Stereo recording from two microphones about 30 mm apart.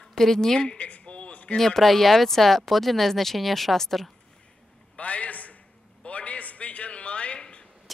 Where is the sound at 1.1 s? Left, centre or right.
Left.